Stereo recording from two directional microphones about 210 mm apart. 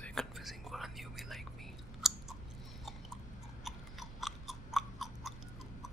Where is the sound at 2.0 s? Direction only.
Centre (ahead or behind).